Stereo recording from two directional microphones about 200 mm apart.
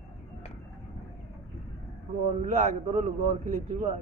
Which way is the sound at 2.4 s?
40° right (ahead or behind).